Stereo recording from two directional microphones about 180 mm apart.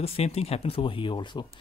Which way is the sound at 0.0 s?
35° left (ahead or behind).